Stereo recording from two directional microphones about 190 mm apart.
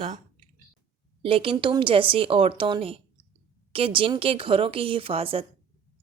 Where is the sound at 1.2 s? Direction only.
30° right (ahead or behind).